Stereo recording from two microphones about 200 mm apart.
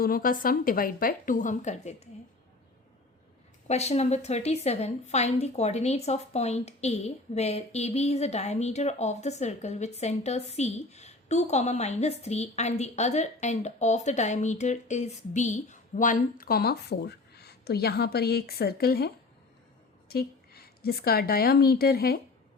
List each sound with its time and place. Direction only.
0.0 s a woman's voice: 45° left (ahead or behind)
3.7 s a woman's voice: 35° left (ahead or behind); by 22.2 s 50° left (ahead or behind)